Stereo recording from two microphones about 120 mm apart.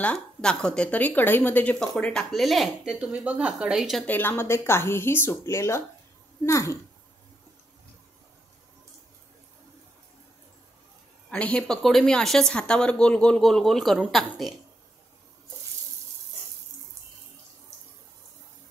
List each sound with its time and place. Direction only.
0.0 s a woman's voice: 10° left (ahead or behind)
4.0 s speech: 15° left (ahead or behind)
11.2 s a woman's voice: 10° left (ahead or behind)